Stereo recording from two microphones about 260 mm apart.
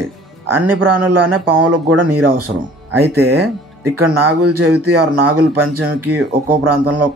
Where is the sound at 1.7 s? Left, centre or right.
Right.